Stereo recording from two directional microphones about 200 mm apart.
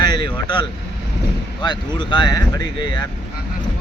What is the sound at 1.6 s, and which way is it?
Speech, 20° left (ahead or behind).